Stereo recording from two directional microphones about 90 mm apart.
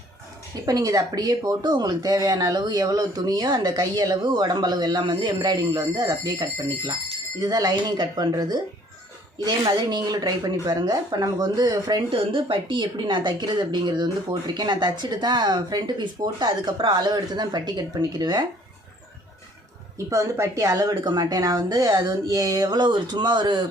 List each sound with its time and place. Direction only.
0.6 s speech: 40° right (ahead or behind)
9.6 s speech: 50° right (ahead or behind)
12.1 s speech: 75° right (ahead or behind); by 18.4 s 50° right (ahead or behind)
20.1 s speech: 35° right (ahead or behind); by 23.6 s 55° right (ahead or behind)